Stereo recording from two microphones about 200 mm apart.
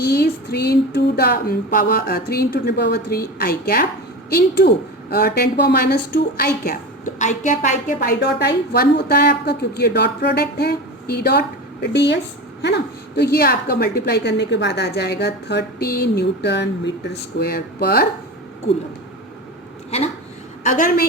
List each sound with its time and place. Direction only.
0.0 s a woman's voice: 55° left (ahead or behind)
8.2 s a woman's voice: 55° left (ahead or behind)
20.7 s a woman's voice: 40° left (ahead or behind)